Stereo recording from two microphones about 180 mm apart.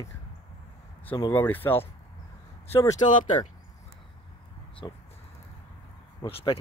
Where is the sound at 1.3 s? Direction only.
10° left (ahead or behind).